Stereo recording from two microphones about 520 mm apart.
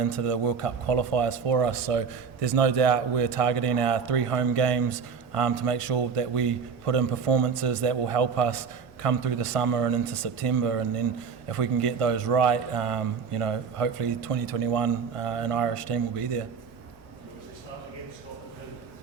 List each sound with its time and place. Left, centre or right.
0.0 s a man's voice: right